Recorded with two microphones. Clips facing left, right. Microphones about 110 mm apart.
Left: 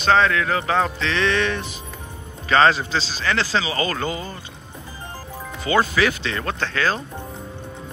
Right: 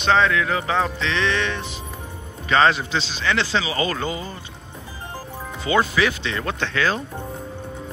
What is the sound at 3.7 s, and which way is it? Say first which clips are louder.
Speech: even; 20° right (ahead or behind).